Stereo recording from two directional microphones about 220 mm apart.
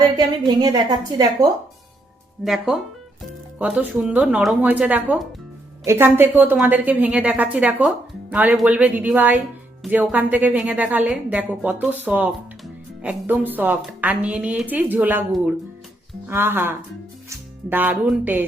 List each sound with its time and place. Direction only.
0.2 s a woman's voice: 20° right (ahead or behind)
2.4 s a woman's voice: centre (ahead or behind)